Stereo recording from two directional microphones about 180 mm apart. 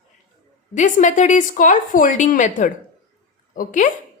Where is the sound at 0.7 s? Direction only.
45° left (ahead or behind).